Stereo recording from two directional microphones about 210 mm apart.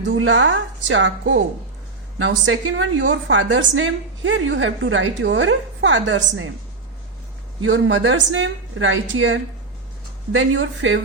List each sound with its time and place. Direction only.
0.0 s a woman's voice: 65° right (ahead or behind)
7.6 s a woman's voice: 65° right (ahead or behind)